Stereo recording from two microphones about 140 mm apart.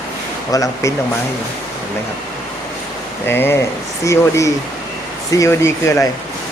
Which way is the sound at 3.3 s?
15° left (ahead or behind).